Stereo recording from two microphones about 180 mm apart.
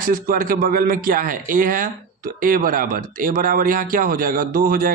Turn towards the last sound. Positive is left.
turn(degrees=-50)  # may be behind; listen again after turning